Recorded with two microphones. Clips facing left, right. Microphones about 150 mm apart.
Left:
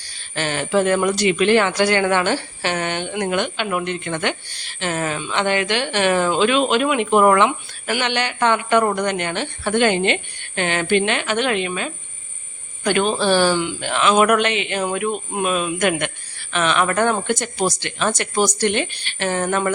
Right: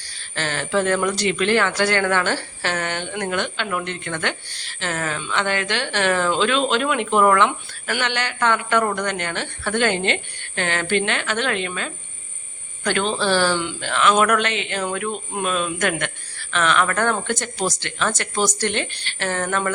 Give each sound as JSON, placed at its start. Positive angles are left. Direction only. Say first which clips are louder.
{"t": 0.3, "sound": "speech", "louder": "left 3 dB", "side_deg": 15}